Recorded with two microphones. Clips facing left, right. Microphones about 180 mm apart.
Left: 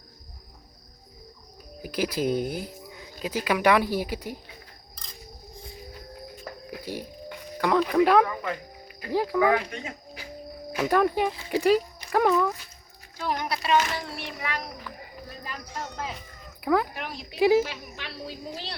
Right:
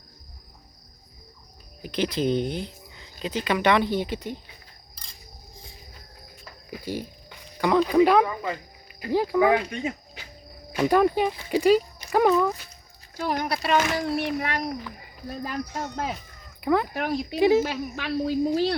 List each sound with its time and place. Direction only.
1.8 s speech: 5° left (ahead or behind)
6.7 s music: centre (ahead or behind)
7.6 s speech: centre (ahead or behind)
10.8 s speech: centre (ahead or behind)
13.1 s speech: 45° right (ahead or behind)
15.8 s speech: 55° right (ahead or behind)
16.6 s speech: centre (ahead or behind)
16.9 s speech: 45° right (ahead or behind)
17.3 s speech: 5° left (ahead or behind)
17.6 s speech: 45° right (ahead or behind)